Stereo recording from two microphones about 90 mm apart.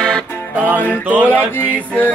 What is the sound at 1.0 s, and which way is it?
Music, 20° right (ahead or behind).